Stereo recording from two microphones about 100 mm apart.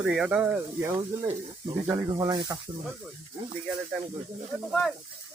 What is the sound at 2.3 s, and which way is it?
Speech, 50° right (ahead or behind).